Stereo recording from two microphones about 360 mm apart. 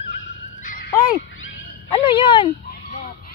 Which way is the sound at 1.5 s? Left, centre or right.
Centre.